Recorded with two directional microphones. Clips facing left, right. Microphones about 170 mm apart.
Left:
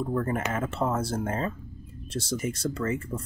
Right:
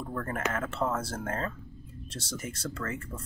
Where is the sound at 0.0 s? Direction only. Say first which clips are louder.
Left 5 dB; 15° left (ahead or behind).